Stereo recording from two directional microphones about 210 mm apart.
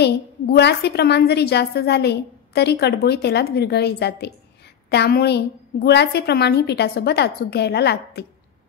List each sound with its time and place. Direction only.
0.0 s a woman's voice: 55° left (ahead or behind)